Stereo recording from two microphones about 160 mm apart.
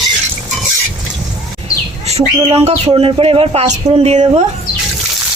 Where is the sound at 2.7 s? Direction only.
40° right (ahead or behind).